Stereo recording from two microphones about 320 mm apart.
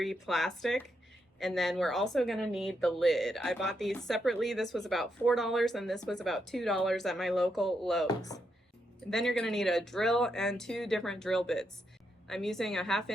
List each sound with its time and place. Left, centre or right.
0.0 s speech: centre
8.0 s speech: centre